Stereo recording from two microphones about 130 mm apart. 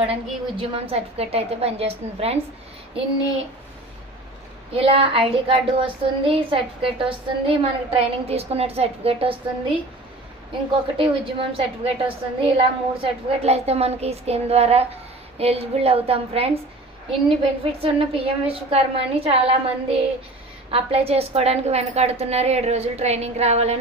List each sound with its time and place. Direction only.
0.0 s a woman's voice: 45° right (ahead or behind)
4.7 s a woman's voice: 45° right (ahead or behind)
11.0 s a woman's voice: 45° right (ahead or behind)